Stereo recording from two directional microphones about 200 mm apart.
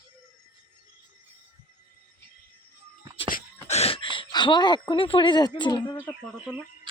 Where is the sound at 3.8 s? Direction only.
25° left (ahead or behind).